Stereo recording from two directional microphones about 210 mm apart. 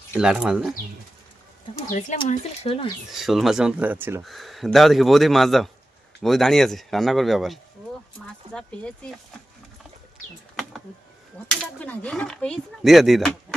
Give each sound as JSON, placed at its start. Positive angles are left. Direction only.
{"t": 0.1, "sound": "speech", "side_deg": -5}
{"t": 1.9, "sound": "speech", "side_deg": 35}
{"t": 3.1, "sound": "speech", "side_deg": 0}
{"t": 11.4, "sound": "speech", "side_deg": 5}